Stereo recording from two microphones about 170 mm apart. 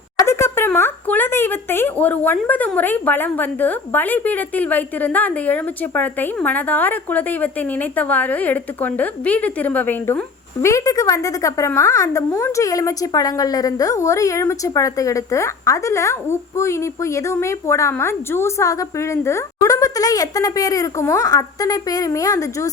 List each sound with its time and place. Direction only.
0.2 s speech: 15° left (ahead or behind)